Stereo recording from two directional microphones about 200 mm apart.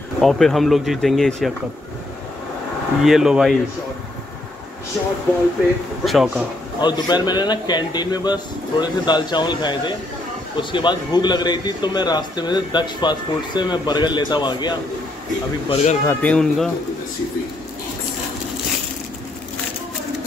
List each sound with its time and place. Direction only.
0.2 s speech: centre (ahead or behind)
3.0 s speech: centre (ahead or behind)
6.0 s speech: centre (ahead or behind)
6.8 s a man's voice: 20° left (ahead or behind)
15.7 s speech: 35° left (ahead or behind)
16.1 s speech: 5° left (ahead or behind)